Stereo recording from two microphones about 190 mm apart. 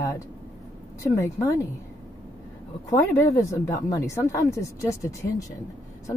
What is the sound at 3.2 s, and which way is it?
Speech, 15° left (ahead or behind).